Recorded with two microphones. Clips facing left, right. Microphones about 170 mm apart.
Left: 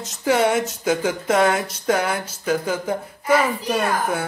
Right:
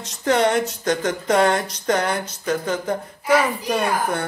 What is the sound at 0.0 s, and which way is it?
Speech, 5° left (ahead or behind).